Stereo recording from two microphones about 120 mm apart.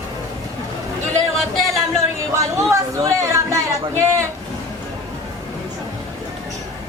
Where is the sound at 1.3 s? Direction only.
Centre (ahead or behind).